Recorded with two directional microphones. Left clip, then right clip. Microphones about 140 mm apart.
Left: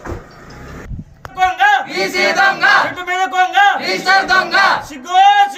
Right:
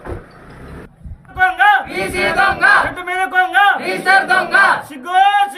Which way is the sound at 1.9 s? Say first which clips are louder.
Left 2 dB; 15° right (ahead or behind).